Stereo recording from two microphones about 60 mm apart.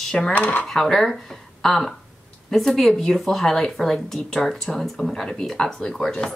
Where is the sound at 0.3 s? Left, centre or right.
Left.